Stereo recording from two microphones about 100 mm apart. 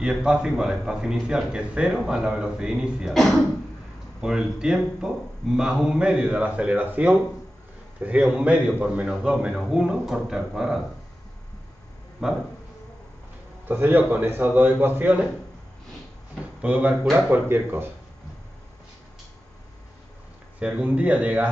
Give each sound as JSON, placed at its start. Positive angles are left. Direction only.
{"t": 0.0, "sound": "a man's voice", "side_deg": -10}
{"t": 4.2, "sound": "a man's voice", "side_deg": -5}
{"t": 12.2, "sound": "speech", "side_deg": -5}
{"t": 13.7, "sound": "a man's voice", "side_deg": -20}
{"t": 16.6, "sound": "a man's voice", "side_deg": -15}
{"t": 16.9, "sound": "speech", "side_deg": 0}
{"t": 17.3, "sound": "a man's voice", "side_deg": -20}
{"t": 20.5, "sound": "a man's voice", "side_deg": -15}